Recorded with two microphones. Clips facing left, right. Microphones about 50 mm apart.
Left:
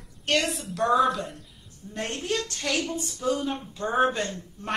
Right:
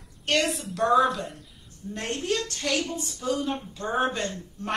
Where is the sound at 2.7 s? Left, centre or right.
Left.